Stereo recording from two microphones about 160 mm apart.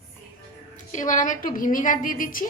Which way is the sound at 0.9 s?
50° left (ahead or behind).